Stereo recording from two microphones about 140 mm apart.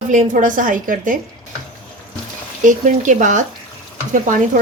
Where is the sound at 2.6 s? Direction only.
70° right (ahead or behind).